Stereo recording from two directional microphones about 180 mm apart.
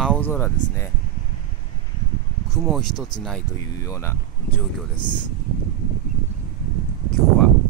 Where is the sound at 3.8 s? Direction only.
15° left (ahead or behind).